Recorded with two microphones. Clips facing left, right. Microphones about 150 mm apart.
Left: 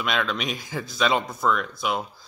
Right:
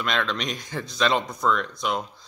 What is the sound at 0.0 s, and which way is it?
Speech, 5° left (ahead or behind).